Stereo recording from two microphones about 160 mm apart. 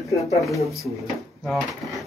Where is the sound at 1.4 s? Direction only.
Centre (ahead or behind).